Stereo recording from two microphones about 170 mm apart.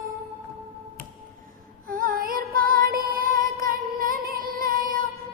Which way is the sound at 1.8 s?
55° right (ahead or behind).